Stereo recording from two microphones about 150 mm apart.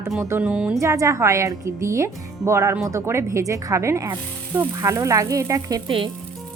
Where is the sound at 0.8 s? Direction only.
20° right (ahead or behind).